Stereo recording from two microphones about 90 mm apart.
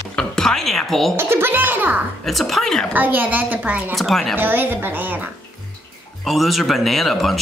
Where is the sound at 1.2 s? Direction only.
25° right (ahead or behind).